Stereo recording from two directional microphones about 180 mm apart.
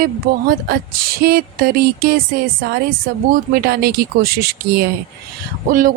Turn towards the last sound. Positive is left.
turn(degrees=-50)  # may be behind; listen again after turning